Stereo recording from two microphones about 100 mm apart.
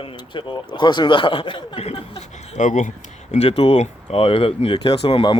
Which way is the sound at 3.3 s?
85° left.